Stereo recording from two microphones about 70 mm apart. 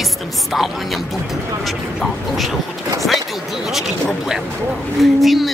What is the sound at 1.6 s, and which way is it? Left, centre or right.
Speech, centre.